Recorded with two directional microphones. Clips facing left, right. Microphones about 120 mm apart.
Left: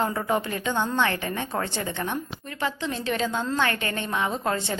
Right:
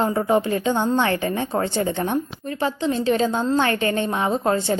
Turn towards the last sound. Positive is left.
turn(degrees=-35)  # may be behind; listen again after turning